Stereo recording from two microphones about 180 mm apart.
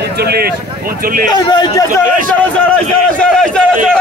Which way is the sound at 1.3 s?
25° left (ahead or behind).